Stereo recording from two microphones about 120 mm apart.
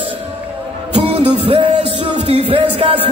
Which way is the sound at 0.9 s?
45° right (ahead or behind).